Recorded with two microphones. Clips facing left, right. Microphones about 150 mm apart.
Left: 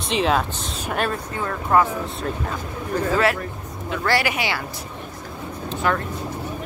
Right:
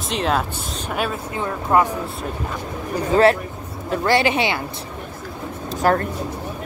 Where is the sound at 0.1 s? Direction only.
Centre (ahead or behind).